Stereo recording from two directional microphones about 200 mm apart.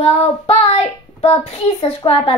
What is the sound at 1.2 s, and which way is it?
A child's voice, 30° left (ahead or behind).